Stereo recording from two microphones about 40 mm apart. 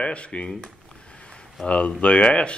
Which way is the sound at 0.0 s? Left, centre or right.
Left.